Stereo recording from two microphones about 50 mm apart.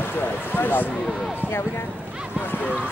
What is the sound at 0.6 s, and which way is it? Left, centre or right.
Speech, left.